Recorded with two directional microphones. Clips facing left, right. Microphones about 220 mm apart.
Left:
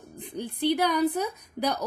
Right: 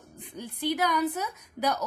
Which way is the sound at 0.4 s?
30° left (ahead or behind).